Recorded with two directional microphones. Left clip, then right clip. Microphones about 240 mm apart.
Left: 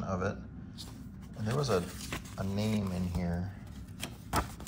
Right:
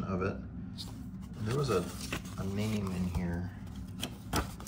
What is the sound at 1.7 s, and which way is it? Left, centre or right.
Speech, left.